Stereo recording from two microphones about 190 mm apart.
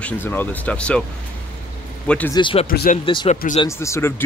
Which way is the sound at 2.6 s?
50° left (ahead or behind).